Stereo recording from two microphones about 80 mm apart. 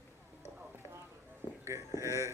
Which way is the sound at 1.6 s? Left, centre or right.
Right.